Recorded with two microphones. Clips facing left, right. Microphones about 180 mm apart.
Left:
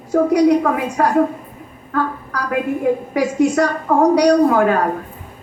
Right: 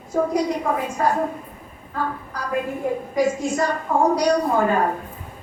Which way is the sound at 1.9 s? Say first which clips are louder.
Left 6 dB; 75° left (ahead or behind).